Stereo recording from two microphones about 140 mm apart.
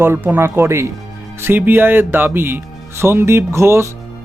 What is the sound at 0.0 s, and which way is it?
Speech, 15° right (ahead or behind).